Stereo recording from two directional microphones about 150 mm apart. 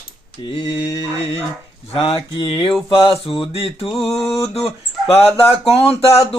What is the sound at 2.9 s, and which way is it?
Speech, 35° left (ahead or behind).